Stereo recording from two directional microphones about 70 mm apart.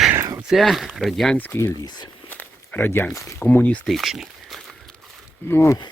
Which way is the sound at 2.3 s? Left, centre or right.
Left.